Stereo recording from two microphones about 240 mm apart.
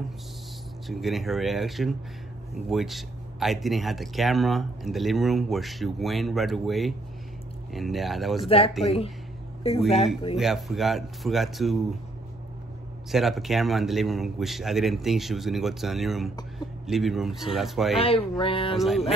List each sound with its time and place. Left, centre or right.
0.8 s speech: centre
8.5 s a man's voice: left
10.3 s speech: centre
13.1 s a man's voice: centre
17.9 s a man's voice: left
18.8 s speech: centre